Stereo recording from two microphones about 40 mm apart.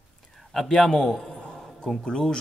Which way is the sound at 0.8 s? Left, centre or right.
Centre.